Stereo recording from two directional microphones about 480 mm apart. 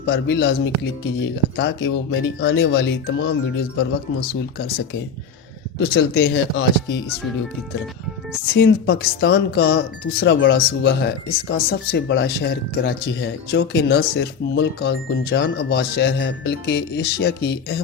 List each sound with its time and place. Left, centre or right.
0.0 s speech: centre
6.1 s speech: left
8.5 s speech: left